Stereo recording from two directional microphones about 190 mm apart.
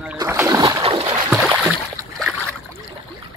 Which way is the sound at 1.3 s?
5° right (ahead or behind).